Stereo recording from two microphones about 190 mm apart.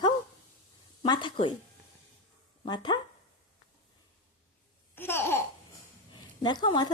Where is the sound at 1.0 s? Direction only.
25° left (ahead or behind).